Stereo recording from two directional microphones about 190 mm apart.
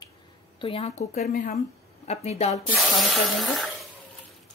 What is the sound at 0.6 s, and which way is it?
Speech, 30° left (ahead or behind).